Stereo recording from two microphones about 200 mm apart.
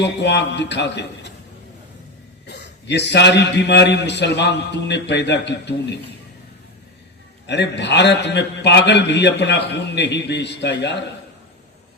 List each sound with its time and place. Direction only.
0.0 s a man's voice: 60° left (ahead or behind)
2.5 s a man's voice: 60° left (ahead or behind)
7.4 s a man's voice: 60° left (ahead or behind)